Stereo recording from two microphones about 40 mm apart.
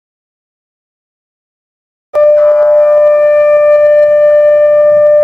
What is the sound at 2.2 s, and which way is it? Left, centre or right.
Music, centre.